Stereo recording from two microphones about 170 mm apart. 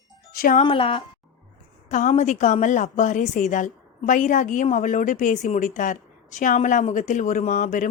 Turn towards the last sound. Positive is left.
turn(degrees=50)  # may be behind; listen again after turning